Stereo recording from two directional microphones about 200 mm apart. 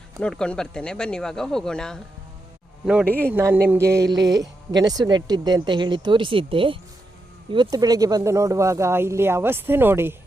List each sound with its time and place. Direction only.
0.2 s speech: 5° left (ahead or behind); by 4.0 s 15° right (ahead or behind)
4.0 s mantra: 60° right (ahead or behind)
4.7 s speech: 20° right (ahead or behind)